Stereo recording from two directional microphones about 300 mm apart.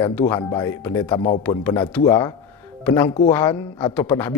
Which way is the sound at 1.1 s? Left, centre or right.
Centre.